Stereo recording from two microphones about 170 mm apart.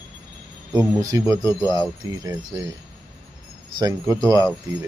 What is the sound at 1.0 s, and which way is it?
Speech, 20° right (ahead or behind).